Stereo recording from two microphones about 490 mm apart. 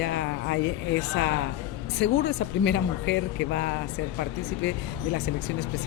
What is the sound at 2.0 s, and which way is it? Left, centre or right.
Speech, left.